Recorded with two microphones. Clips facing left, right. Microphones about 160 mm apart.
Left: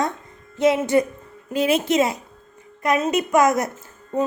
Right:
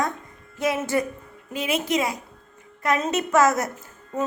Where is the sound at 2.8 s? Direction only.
15° left (ahead or behind).